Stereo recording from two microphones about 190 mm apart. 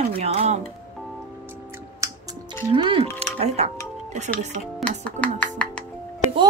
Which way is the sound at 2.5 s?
25° right (ahead or behind).